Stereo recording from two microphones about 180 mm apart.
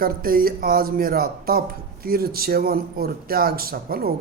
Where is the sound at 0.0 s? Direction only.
55° right (ahead or behind).